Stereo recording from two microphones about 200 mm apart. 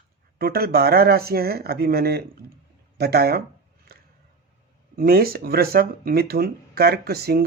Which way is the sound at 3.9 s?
50° right (ahead or behind).